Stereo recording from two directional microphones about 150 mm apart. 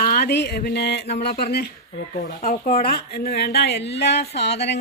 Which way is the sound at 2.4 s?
70° left (ahead or behind).